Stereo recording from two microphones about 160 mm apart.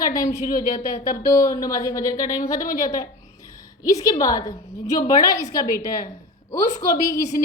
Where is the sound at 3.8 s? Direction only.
20° left (ahead or behind).